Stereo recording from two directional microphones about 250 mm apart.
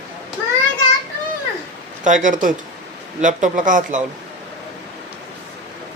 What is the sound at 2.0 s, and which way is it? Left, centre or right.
Speech, right.